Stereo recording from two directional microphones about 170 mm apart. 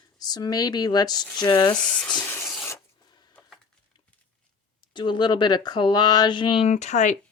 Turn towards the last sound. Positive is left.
turn(degrees=45)  # may be behind; listen again after turning